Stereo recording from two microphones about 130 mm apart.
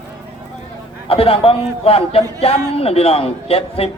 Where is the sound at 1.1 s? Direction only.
45° left (ahead or behind).